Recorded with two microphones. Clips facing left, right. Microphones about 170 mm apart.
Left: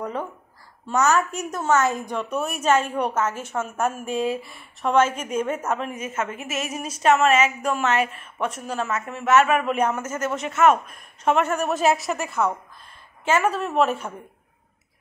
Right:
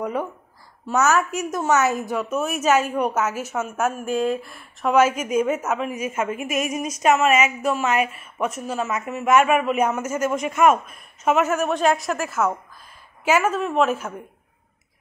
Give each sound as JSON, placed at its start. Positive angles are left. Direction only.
{"t": 0.0, "sound": "a woman's voice", "side_deg": -10}